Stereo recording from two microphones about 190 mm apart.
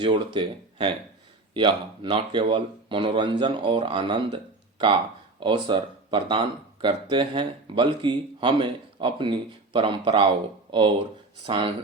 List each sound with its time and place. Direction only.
0.0 s speech: 25° right (ahead or behind)
5.4 s speech: 25° right (ahead or behind)